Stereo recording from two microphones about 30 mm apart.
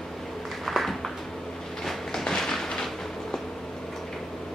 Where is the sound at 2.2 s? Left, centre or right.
Centre.